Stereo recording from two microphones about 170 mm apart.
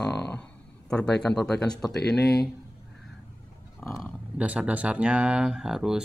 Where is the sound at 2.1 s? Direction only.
70° left (ahead or behind).